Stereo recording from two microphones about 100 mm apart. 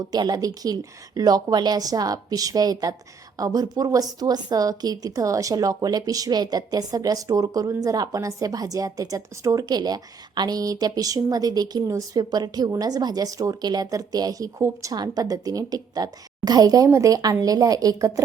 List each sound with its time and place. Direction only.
0.1 s a woman's voice: 40° right (ahead or behind)